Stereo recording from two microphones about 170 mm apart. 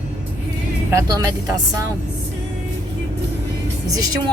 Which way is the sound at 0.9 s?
20° right (ahead or behind).